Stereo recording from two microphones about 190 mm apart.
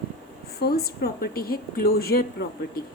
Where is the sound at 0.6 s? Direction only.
55° left (ahead or behind).